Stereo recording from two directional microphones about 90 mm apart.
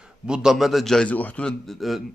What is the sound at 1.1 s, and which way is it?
Speech, 15° left (ahead or behind).